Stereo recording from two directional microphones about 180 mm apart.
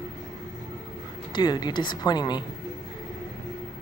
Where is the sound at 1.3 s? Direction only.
25° left (ahead or behind).